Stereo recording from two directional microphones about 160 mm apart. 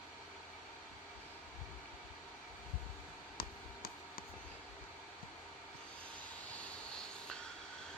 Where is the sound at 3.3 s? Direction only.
65° left (ahead or behind).